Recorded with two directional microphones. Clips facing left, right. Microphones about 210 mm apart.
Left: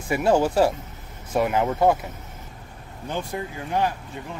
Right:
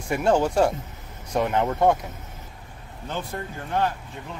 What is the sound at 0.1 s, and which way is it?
Speech, 5° left (ahead or behind).